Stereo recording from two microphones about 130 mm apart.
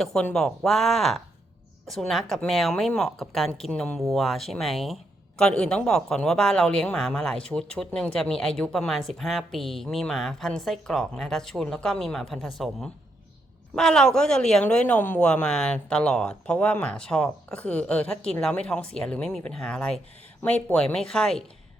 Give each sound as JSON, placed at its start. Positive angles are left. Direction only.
{"t": 0.0, "sound": "a woman's voice", "side_deg": 5}